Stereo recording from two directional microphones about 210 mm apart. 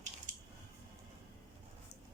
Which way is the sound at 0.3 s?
35° right (ahead or behind).